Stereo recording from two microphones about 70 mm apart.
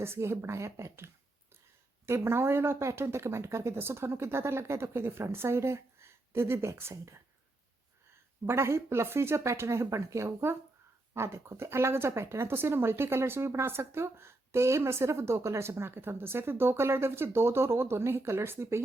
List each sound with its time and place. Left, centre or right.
0.0 s speech: right
8.4 s speech: right